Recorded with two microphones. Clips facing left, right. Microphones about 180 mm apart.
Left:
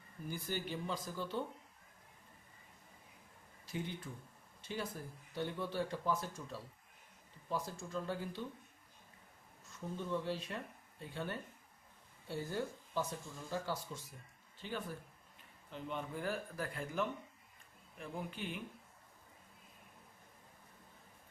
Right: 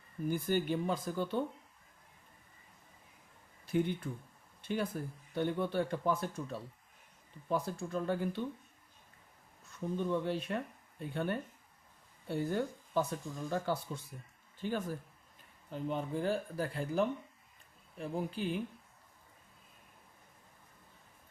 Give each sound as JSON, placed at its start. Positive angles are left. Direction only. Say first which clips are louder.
{"t": 0.3, "sound": "speech", "louder": "right 9 dB", "side_deg": -55}
{"t": 3.7, "sound": "speech", "louder": "right 10 dB", "side_deg": -55}
{"t": 10.0, "sound": "speech", "louder": "right 5 dB", "side_deg": -60}
{"t": 14.6, "sound": "speech", "louder": "right 7 dB", "side_deg": -45}